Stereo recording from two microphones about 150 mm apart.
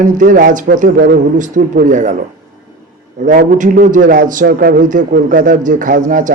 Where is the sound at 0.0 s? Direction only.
60° right (ahead or behind).